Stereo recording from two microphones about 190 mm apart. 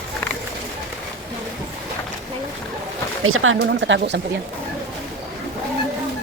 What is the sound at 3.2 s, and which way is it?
Speech, 90° right.